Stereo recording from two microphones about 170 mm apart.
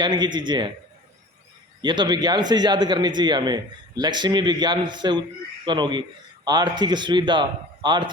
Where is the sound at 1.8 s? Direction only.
25° right (ahead or behind).